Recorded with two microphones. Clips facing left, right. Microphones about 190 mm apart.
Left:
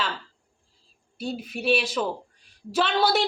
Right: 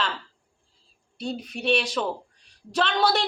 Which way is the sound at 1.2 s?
5° left (ahead or behind).